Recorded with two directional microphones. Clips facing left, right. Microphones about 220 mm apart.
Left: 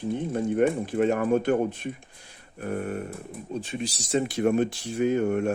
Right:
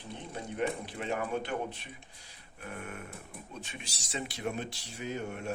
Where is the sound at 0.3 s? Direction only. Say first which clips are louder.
Left 10 dB; 50° left (ahead or behind).